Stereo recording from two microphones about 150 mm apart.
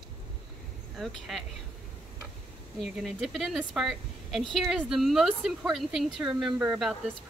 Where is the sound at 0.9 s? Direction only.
Centre (ahead or behind).